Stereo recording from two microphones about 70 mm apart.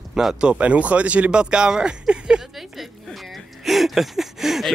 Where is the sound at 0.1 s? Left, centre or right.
Centre.